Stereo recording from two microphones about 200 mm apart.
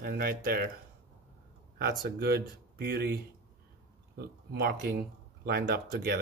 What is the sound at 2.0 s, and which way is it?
Speech, 50° right (ahead or behind).